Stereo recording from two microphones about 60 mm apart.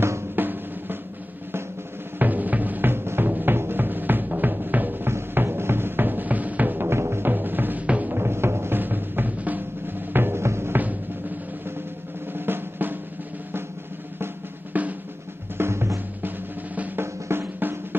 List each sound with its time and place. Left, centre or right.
0.4 s drum: right
2.1 s music: right
6.9 s music: right
7.8 s music: right
8.1 s music: right
10.1 s music: right
12.4 s drum: right
14.2 s drum: right
15.5 s drum: right
16.2 s drum: right
17.0 s drum: right